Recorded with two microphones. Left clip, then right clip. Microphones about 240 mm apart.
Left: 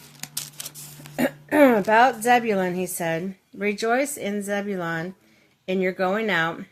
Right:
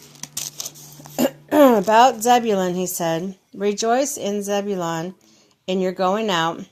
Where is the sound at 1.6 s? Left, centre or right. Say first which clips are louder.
Right 3 dB; centre.